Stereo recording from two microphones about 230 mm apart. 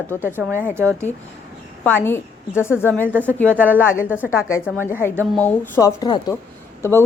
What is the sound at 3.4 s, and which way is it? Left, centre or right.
Speech, centre.